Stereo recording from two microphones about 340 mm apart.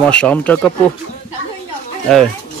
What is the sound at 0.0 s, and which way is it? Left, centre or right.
Speech, centre.